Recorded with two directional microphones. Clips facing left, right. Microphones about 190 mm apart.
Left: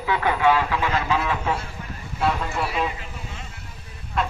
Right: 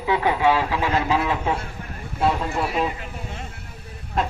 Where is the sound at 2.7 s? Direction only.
45° right (ahead or behind).